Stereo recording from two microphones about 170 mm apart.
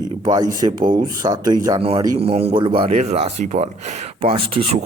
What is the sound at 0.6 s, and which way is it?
Speech, 30° right (ahead or behind).